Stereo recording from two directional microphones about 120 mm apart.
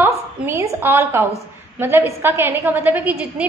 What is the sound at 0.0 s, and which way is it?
A woman's voice, 20° right (ahead or behind).